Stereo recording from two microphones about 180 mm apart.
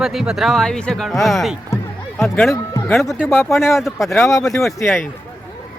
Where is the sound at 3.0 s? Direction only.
Centre (ahead or behind).